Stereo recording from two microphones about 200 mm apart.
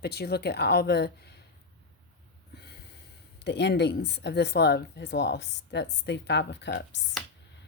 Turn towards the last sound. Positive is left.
turn(degrees=60)  # may be behind; listen again after turning